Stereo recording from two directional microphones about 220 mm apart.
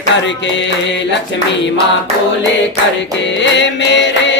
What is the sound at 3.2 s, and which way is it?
Music, 55° left (ahead or behind).